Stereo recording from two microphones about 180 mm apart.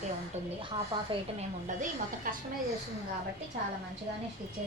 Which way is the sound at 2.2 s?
50° right (ahead or behind).